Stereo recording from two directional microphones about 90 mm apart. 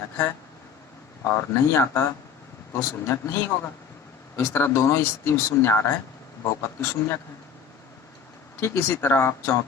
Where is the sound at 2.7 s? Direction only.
30° left (ahead or behind).